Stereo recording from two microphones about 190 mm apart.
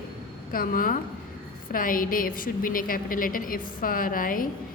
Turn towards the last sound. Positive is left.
turn(degrees=45)  # may be behind; listen again after turning